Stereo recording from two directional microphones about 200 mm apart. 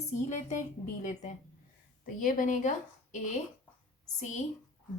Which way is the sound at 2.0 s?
40° left (ahead or behind).